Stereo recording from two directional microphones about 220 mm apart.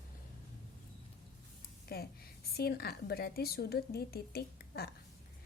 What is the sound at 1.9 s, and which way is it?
A woman's voice, 45° left (ahead or behind).